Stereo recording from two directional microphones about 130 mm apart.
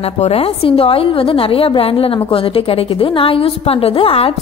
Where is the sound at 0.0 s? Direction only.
50° left (ahead or behind).